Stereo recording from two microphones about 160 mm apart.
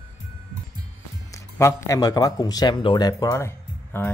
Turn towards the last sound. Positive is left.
turn(degrees=15)  # may be behind; listen again after turning